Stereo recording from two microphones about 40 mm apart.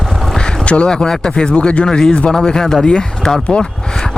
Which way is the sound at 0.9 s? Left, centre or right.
Centre.